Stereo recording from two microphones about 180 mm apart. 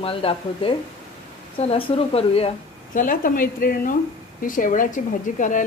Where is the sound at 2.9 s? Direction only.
50° left (ahead or behind).